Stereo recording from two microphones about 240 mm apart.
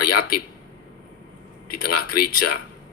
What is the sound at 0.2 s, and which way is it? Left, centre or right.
Speech, left.